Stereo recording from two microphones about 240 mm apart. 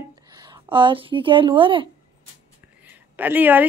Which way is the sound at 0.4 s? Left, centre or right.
Centre.